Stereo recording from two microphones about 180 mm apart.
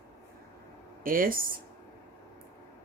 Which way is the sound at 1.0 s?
50° right (ahead or behind).